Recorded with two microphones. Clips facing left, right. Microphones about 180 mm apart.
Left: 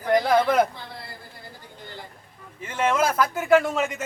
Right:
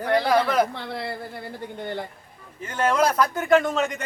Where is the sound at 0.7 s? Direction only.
65° right (ahead or behind).